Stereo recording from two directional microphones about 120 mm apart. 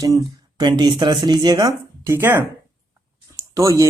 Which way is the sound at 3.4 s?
25° right (ahead or behind).